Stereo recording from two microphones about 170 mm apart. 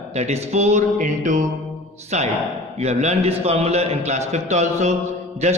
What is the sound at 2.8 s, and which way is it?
A man's voice, 40° right (ahead or behind).